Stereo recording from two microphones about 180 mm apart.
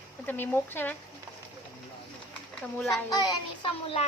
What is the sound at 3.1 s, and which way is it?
Music, 20° left (ahead or behind).